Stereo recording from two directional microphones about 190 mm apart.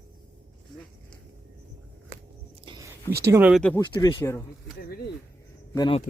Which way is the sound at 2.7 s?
25° right (ahead or behind).